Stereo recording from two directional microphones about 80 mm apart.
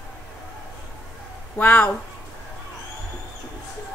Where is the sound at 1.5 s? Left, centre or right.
Left.